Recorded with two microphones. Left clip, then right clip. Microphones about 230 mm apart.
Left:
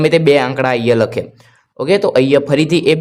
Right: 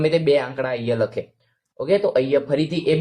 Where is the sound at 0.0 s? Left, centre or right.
Left.